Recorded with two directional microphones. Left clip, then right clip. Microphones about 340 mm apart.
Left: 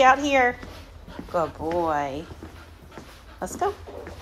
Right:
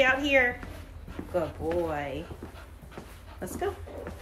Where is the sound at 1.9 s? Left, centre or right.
Centre.